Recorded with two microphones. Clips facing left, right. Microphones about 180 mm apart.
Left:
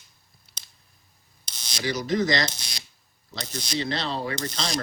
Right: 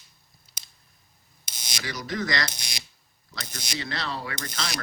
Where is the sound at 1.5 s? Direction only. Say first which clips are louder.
Even; 10° right (ahead or behind).